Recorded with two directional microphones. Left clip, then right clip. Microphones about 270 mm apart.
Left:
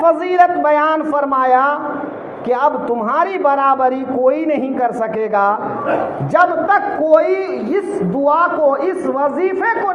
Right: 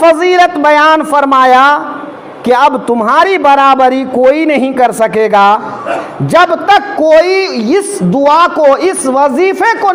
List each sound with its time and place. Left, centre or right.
0.0 s a man's voice: right